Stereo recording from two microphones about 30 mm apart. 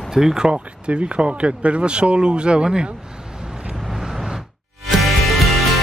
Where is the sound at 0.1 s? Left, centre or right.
Centre.